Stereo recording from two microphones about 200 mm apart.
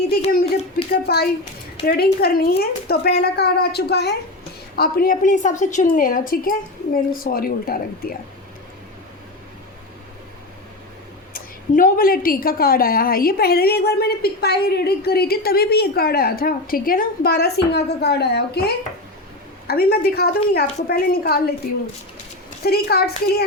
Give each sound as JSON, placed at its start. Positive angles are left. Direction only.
{"t": 0.9, "sound": "a woman's voice", "side_deg": 50}
{"t": 11.3, "sound": "a woman's voice", "side_deg": 45}
{"t": 22.6, "sound": "a woman's voice", "side_deg": 50}